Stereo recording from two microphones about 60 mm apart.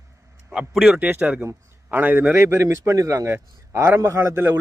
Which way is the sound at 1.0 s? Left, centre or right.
Right.